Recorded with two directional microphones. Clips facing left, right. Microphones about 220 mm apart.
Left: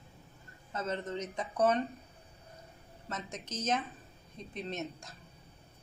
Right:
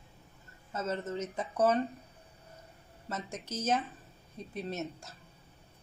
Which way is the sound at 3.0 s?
10° right (ahead or behind).